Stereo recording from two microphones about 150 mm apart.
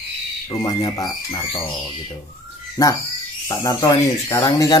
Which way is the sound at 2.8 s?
25° left (ahead or behind).